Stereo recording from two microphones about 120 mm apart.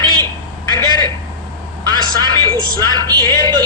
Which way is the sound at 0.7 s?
35° right (ahead or behind).